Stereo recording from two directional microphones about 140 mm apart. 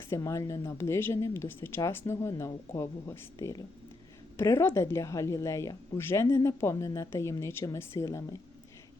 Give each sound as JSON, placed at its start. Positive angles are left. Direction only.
{"t": 0.1, "sound": "speech", "side_deg": 20}